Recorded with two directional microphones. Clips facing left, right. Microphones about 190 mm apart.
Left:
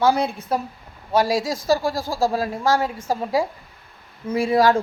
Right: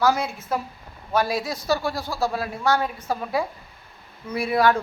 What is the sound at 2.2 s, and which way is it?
Speech, 35° left (ahead or behind).